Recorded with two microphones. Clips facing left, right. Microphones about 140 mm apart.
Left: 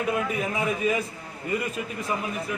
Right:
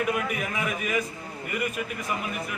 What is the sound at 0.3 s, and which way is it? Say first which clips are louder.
A man's voice: left 3 dB; 30° left (ahead or behind).